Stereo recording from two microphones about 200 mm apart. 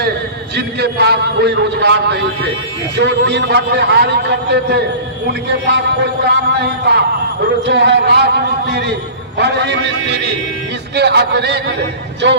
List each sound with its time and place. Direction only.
0.5 s a man's voice: 55° right (ahead or behind)